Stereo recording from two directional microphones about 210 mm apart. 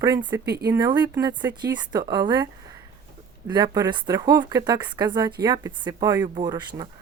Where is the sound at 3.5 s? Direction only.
20° right (ahead or behind).